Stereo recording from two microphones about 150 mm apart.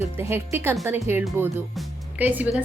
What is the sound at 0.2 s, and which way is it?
A woman's voice, 15° right (ahead or behind).